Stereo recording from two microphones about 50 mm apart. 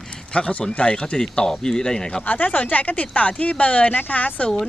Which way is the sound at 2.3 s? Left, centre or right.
Left.